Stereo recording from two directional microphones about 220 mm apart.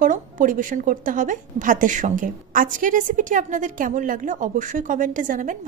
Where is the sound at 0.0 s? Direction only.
35° right (ahead or behind).